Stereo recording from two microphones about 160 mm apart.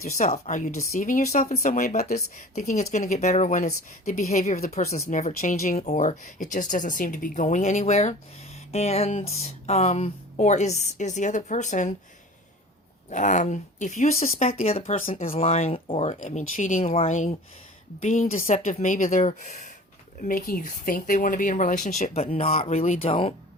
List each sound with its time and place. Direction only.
0.2 s speech: 45° left (ahead or behind); by 2.1 s 60° left (ahead or behind)
2.1 s speech: 50° left (ahead or behind)
4.0 s a woman's voice: 65° left (ahead or behind)
4.3 s speech: 45° left (ahead or behind)
5.7 s speech: 45° left (ahead or behind)
13.1 s speech: 50° left (ahead or behind)